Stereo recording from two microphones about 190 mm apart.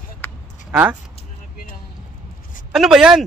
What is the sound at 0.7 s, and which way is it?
Speech, 5° right (ahead or behind).